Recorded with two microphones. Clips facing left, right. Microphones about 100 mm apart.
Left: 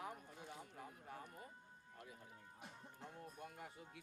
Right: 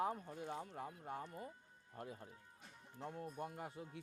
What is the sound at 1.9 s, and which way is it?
Speech, 35° right (ahead or behind).